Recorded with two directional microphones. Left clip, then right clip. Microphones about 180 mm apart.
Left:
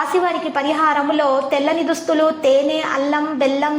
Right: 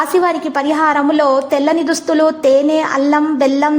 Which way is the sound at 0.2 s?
35° right (ahead or behind).